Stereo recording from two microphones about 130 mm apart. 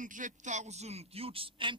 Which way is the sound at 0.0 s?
80° right.